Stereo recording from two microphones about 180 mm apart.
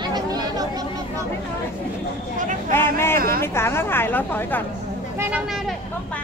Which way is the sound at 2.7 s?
15° left (ahead or behind).